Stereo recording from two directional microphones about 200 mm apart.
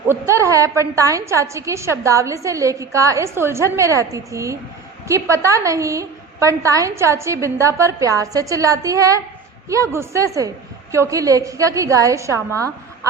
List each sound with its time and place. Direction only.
0.1 s a woman's voice: 15° right (ahead or behind)